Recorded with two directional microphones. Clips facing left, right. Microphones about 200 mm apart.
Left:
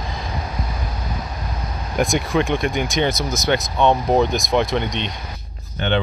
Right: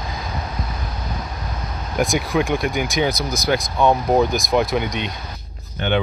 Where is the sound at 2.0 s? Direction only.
Centre (ahead or behind).